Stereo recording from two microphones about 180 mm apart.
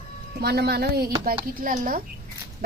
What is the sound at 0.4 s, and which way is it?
A woman's voice, 60° right (ahead or behind).